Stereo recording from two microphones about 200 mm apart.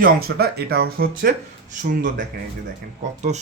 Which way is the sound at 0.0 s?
50° right (ahead or behind).